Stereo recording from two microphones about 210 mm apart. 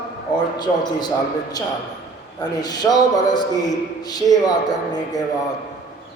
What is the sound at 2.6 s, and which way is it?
A man's voice, 20° left (ahead or behind).